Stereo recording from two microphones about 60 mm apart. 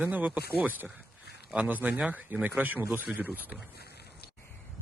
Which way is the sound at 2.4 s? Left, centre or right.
Right.